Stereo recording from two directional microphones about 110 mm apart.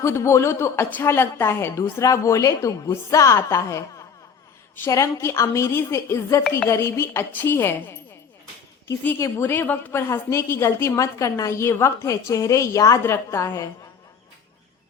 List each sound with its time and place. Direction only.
0.0 s a woman's voice: 25° left (ahead or behind)
9.0 s a woman's voice: 25° left (ahead or behind)